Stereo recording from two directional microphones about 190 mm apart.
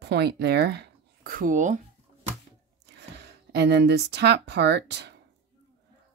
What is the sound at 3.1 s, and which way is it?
Speech, 65° right (ahead or behind).